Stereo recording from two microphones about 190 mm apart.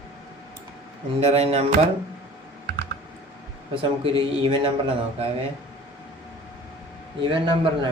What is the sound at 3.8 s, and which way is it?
Speech, 30° right (ahead or behind).